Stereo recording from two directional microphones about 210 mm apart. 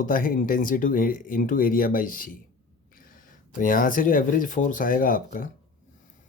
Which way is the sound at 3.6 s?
40° left (ahead or behind).